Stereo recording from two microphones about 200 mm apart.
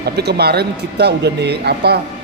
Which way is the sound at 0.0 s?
55° right (ahead or behind).